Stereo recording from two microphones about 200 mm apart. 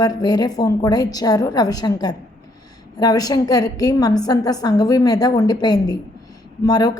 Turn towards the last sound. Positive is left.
turn(degrees=20)  # may be behind; listen again after turning